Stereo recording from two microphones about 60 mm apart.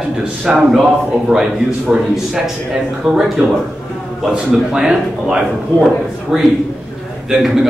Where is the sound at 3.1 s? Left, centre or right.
Centre.